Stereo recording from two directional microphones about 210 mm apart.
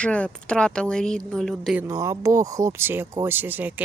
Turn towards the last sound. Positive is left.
turn(degrees=-10)  # may be behind; listen again after turning